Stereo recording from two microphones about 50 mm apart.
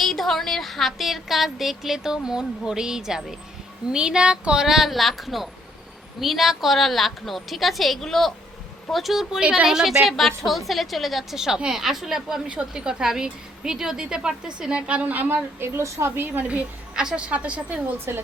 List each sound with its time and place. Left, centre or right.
0.0 s a woman's voice: centre; by 4.6 s right
4.6 s a woman's voice: centre
9.4 s a woman's voice: right
9.6 s a woman's voice: centre
12.5 s a woman's voice: centre; by 15.7 s right
15.7 s a woman's voice: right
16.9 s a woman's voice: centre
17.2 s a woman's voice: right
18.1 s speech: right